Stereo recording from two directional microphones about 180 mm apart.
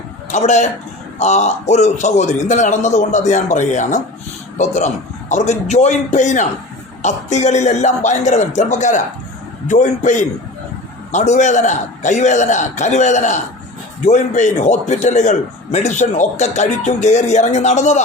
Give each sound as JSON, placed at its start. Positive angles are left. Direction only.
{"t": 0.3, "sound": "a man's voice", "side_deg": 40}